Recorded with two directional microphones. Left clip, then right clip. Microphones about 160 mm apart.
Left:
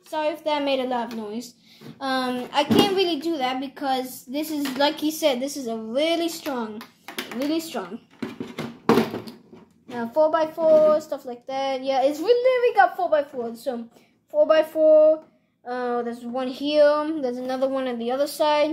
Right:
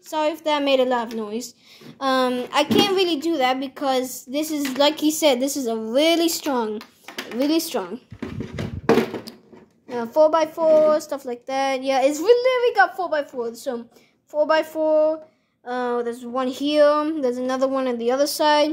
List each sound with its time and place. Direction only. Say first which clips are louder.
0.1 s a child's voice: right 3 dB; 55° right (ahead or behind); by 7.9 s 90° right
9.9 s a woman's voice: right 3 dB; 90° right
10.9 s speech: right 1 dB; 65° right (ahead or behind)
12.4 s a woman's voice: right 1 dB; 30° right (ahead or behind)
12.6 s a woman's voice: even; 20° right (ahead or behind); by 18.7 s 50° right (ahead or behind)